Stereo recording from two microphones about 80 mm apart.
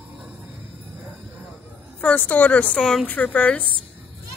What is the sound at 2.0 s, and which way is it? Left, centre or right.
Speech, centre.